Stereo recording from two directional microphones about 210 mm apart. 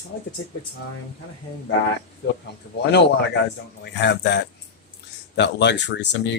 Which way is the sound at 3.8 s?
55° left (ahead or behind).